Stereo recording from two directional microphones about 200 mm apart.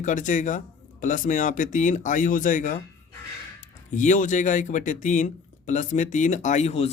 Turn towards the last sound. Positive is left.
turn(degrees=35)  # may be behind; listen again after turning